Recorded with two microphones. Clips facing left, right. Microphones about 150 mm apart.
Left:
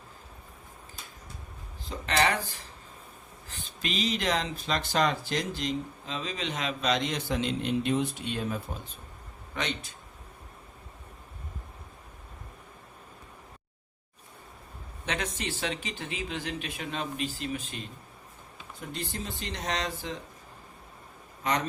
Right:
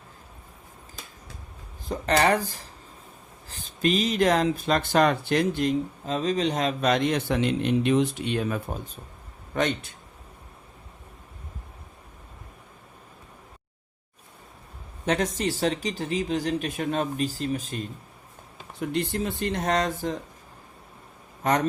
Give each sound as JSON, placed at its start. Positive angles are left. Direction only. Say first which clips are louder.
{"t": 1.9, "sound": "speech", "louder": "right 5 dB", "side_deg": -40}
{"t": 9.6, "sound": "speech", "louder": "right 8 dB", "side_deg": -50}
{"t": 15.0, "sound": "speech", "louder": "right 8 dB", "side_deg": -40}
{"t": 18.8, "sound": "speech", "louder": "right 10 dB", "side_deg": -65}
{"t": 21.4, "sound": "speech", "louder": "right 5 dB", "side_deg": -45}